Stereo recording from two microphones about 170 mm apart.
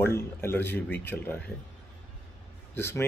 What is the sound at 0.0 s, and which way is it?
Speech, 15° left (ahead or behind).